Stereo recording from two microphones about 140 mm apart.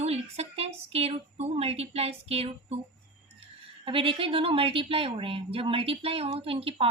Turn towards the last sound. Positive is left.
turn(degrees=-45)  # may be behind; listen again after turning